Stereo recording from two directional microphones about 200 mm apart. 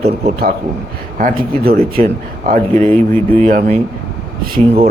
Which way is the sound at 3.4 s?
40° right (ahead or behind).